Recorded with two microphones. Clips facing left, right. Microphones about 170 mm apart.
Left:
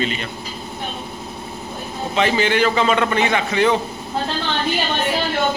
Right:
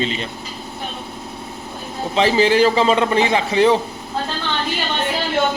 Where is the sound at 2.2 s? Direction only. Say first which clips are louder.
Right 3 dB; 30° right (ahead or behind).